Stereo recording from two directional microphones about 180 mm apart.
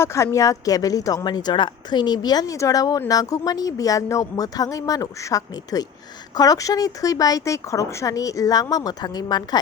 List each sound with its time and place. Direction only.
0.0 s speech: 15° left (ahead or behind)